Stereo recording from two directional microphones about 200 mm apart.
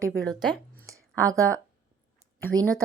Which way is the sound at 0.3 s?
Centre (ahead or behind).